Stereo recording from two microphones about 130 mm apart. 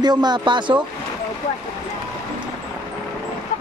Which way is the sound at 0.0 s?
35° right (ahead or behind).